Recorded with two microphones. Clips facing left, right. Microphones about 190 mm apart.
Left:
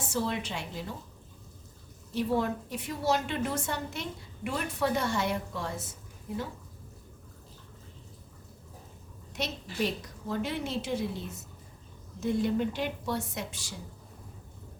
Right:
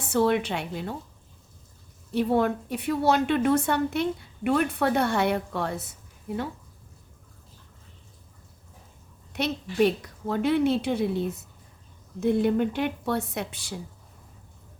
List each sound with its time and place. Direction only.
0.0 s a woman's voice: 65° right (ahead or behind)
2.1 s a woman's voice: 60° right (ahead or behind)
9.3 s a woman's voice: 60° right (ahead or behind)